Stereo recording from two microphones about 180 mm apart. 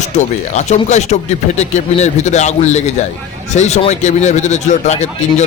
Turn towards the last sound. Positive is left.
turn(degrees=40)  # may be behind; listen again after turning